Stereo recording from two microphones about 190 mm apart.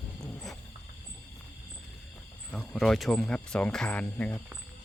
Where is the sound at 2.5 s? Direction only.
Centre (ahead or behind).